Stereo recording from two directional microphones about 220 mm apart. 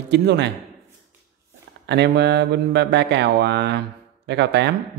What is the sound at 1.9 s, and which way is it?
Mantra, 50° right (ahead or behind).